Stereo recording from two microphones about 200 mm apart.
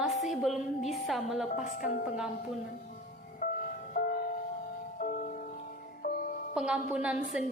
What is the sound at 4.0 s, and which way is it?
Music, 50° left (ahead or behind).